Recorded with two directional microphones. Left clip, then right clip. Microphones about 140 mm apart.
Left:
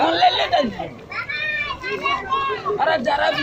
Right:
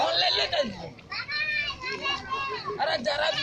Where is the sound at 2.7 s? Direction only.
85° right.